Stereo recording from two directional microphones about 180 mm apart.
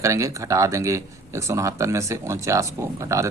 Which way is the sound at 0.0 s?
15° right (ahead or behind).